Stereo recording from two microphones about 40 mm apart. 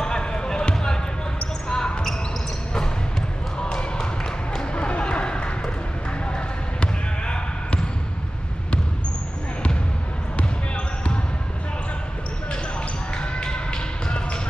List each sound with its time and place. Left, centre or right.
0.0 s basketball bounce: centre
3.6 s basketball bounce: left
4.6 s a sound: left
6.3 s basketball bounce: left
13.2 s basketball bounce: left